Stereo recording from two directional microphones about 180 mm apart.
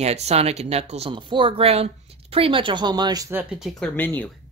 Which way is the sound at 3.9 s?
10° left (ahead or behind).